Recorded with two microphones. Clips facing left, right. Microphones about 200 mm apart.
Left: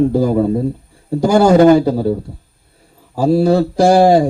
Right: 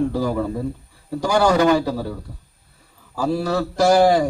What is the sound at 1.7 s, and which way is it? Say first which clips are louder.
Speech: left 8 dB; 25° left (ahead or behind).